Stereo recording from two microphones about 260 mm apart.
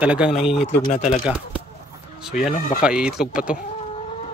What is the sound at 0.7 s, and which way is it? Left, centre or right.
Speech, left.